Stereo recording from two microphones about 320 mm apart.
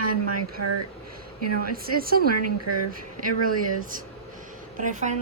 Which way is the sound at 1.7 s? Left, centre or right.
Right.